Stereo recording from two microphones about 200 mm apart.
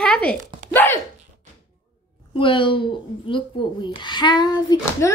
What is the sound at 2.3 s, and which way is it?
Speech, 25° left (ahead or behind).